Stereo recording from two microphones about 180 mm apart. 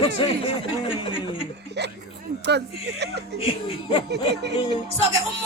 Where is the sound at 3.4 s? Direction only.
30° left (ahead or behind).